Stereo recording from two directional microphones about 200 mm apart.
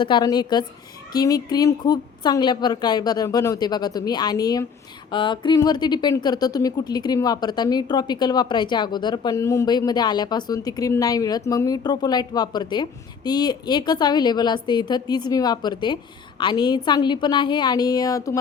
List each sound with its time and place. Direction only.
0.0 s speech: 20° left (ahead or behind)